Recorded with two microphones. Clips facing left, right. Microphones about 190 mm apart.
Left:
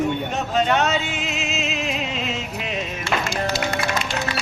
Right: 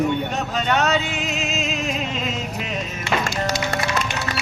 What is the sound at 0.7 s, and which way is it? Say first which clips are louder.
Music: right 1 dB; 40° right (ahead or behind).